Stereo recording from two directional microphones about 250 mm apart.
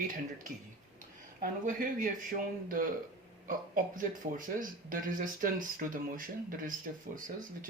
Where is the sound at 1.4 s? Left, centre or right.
Right.